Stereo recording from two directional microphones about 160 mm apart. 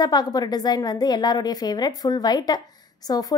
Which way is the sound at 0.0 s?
25° left (ahead or behind).